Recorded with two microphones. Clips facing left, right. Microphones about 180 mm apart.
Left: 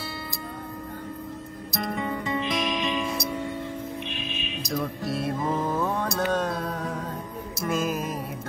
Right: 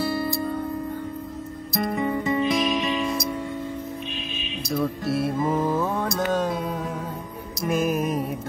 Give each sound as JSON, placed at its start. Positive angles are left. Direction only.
{"t": 0.0, "sound": "music", "side_deg": -40}
{"t": 1.8, "sound": "music", "side_deg": -5}
{"t": 4.7, "sound": "music", "side_deg": 0}